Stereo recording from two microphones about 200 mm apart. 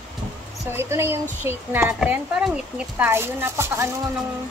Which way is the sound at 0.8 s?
10° right (ahead or behind).